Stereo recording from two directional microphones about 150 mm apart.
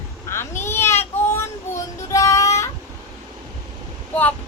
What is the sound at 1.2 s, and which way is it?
Child singing, 15° left (ahead or behind).